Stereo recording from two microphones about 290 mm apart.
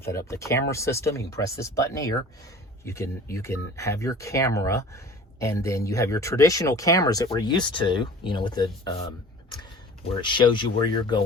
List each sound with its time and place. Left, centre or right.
0.0 s speech: centre
10.2 s speech: centre